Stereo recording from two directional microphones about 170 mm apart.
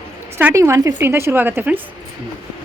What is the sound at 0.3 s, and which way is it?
Speech, 15° right (ahead or behind).